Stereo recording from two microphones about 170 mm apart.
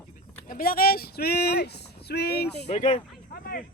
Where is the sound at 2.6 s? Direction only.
40° left (ahead or behind).